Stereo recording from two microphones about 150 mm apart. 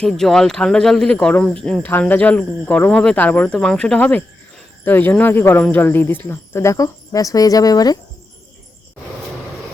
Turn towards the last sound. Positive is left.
turn(degrees=25)  # may be behind; listen again after turning